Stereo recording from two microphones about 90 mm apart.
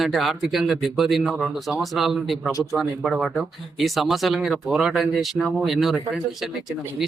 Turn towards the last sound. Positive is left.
turn(degrees=0)  # may be behind; listen again after turning